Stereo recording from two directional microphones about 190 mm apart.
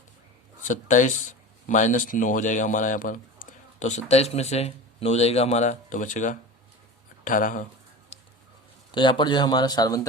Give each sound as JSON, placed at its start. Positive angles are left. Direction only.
{"t": 0.6, "sound": "speech", "side_deg": 40}
{"t": 8.9, "sound": "speech", "side_deg": 25}